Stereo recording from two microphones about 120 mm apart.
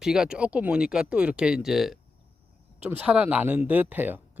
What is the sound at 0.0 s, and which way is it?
Speech, 5° right (ahead or behind).